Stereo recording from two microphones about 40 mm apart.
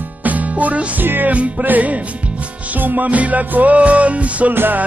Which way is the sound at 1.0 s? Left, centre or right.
Right.